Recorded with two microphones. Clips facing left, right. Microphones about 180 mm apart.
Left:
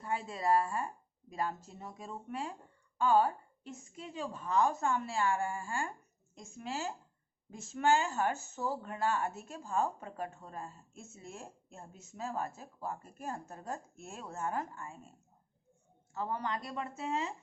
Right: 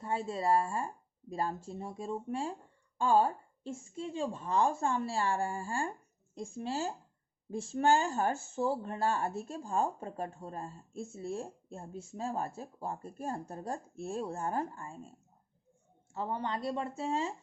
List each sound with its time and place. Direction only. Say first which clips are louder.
0.0 s a woman's voice: right 2 dB; 25° right (ahead or behind)
16.1 s a woman's voice: right 1 dB; 30° right (ahead or behind)